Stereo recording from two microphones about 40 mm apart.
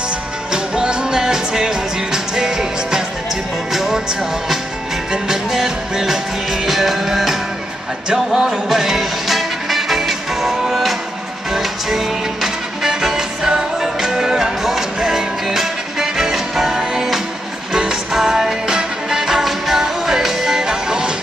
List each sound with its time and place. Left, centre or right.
0.5 s music: centre
5.1 s music: centre